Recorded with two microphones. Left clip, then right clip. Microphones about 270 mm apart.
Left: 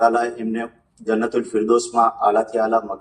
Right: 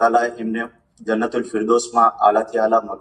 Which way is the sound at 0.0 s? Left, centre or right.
Centre.